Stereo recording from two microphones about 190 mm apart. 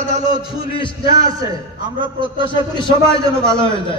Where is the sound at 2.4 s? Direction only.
25° left (ahead or behind).